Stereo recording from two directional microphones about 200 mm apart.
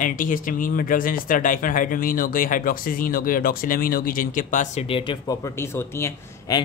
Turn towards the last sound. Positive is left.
turn(degrees=15)  # may be behind; listen again after turning